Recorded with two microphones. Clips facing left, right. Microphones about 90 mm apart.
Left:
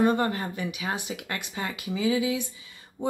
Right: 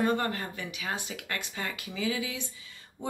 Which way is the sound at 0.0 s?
15° left (ahead or behind).